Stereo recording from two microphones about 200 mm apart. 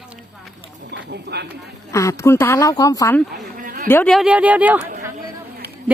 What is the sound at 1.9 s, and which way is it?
Speech, 15° left (ahead or behind).